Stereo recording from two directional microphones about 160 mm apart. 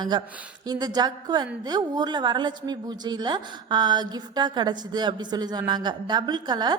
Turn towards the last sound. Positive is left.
turn(degrees=-25)  # may be behind; listen again after turning